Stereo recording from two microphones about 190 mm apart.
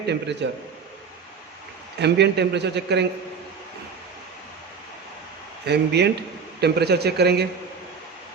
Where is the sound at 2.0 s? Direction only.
60° right (ahead or behind).